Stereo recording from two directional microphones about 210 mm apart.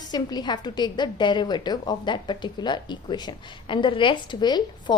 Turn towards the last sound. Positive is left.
turn(degrees=20)  # may be behind; listen again after turning